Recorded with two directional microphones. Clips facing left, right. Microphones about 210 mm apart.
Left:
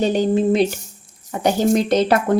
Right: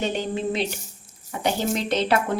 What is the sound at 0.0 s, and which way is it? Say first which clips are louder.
A woman's voice: left 9 dB; 40° left (ahead or behind).